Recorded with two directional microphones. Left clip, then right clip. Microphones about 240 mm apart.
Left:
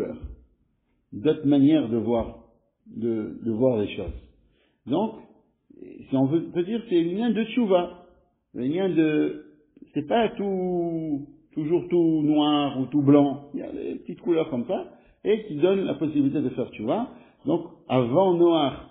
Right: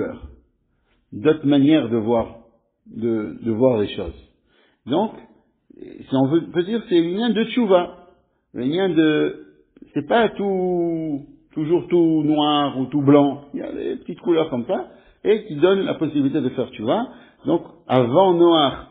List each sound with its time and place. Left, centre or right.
1.2 s a man's voice: right
6.1 s a man's voice: right